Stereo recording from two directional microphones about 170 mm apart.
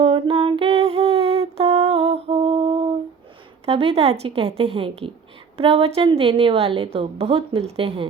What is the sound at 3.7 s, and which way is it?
A woman's voice, 35° right (ahead or behind).